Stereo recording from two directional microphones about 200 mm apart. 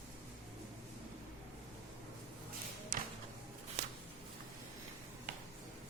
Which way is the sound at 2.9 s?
45° right (ahead or behind).